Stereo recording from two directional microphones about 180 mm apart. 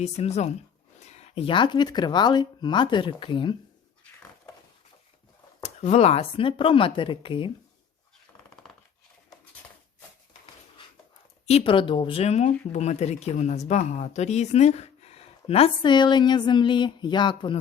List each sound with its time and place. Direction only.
0.0 s speech: 35° left (ahead or behind)
5.6 s speech: 40° left (ahead or behind)
11.4 s speech: 30° left (ahead or behind)